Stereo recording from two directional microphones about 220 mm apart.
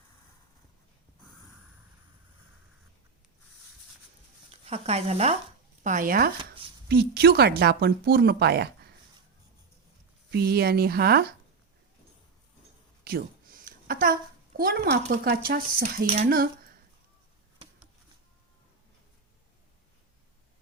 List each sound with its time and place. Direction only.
4.6 s speech: 30° right (ahead or behind); by 8.9 s 45° right (ahead or behind)
10.3 s speech: 45° right (ahead or behind)
13.1 s a sound: 40° right (ahead or behind)
15.1 s speech: 45° right (ahead or behind)